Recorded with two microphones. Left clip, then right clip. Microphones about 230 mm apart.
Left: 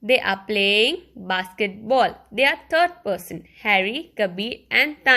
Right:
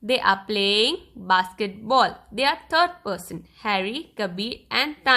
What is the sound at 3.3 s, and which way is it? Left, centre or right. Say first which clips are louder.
Speech: left 2 dB; right.